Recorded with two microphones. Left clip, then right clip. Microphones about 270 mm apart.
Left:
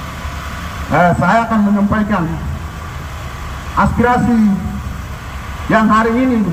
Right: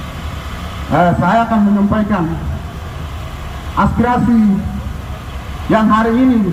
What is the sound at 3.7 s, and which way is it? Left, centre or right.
Speech, centre.